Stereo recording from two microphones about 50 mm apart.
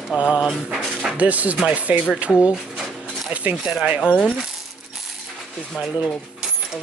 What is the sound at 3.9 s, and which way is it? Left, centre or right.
Speech, centre.